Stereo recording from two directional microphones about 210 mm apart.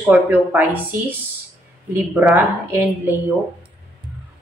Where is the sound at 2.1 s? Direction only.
10° right (ahead or behind).